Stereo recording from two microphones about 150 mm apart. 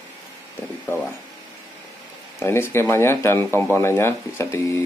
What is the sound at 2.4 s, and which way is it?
Speech, 15° left (ahead or behind).